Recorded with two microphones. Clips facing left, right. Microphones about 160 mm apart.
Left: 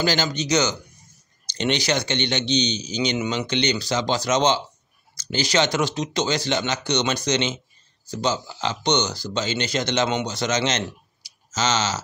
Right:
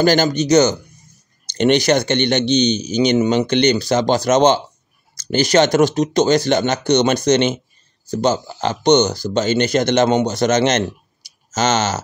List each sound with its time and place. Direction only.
0.0 s a man's voice: 50° right (ahead or behind)